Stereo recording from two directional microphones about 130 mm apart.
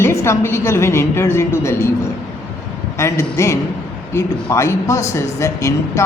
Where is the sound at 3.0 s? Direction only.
20° left (ahead or behind).